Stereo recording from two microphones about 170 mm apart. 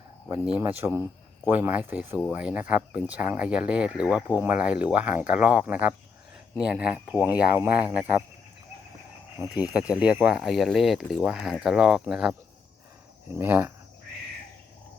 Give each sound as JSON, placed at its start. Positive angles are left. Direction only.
{"t": 0.6, "sound": "speech", "side_deg": -15}
{"t": 9.6, "sound": "speech", "side_deg": -5}